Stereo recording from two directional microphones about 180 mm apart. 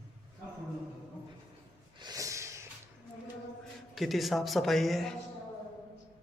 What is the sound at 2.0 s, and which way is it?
Snort, 20° right (ahead or behind).